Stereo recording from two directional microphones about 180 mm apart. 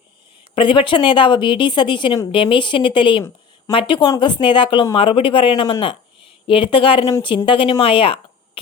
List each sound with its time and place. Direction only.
0.5 s speech: 30° left (ahead or behind)